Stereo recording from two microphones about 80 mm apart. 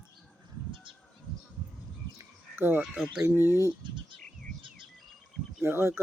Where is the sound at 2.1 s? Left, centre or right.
Right.